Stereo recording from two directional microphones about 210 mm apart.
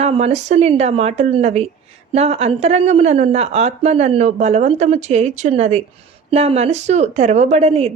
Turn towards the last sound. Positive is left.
turn(degrees=-30)  # may be behind; listen again after turning